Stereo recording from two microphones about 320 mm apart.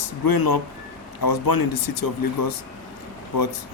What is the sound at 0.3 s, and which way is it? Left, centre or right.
Speech, left.